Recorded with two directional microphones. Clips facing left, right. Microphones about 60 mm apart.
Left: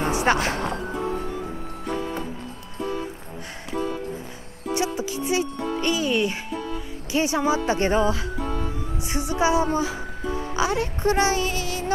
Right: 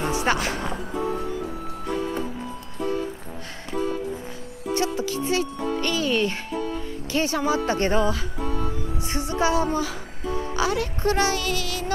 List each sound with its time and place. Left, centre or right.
0.0 s speech: left
4.7 s speech: centre
9.3 s speech: left